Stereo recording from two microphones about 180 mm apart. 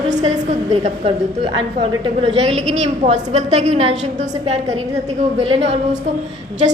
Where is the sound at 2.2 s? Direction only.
35° right (ahead or behind).